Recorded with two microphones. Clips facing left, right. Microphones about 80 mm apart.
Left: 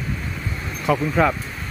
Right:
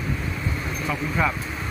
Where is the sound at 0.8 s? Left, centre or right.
Left.